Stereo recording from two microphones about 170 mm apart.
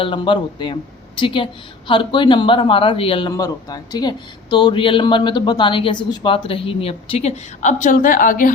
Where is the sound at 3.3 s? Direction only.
20° left (ahead or behind).